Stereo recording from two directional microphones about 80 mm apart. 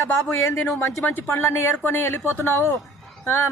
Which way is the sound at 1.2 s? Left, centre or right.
Left.